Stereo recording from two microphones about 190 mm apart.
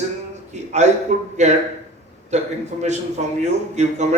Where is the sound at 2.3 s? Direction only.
35° right (ahead or behind).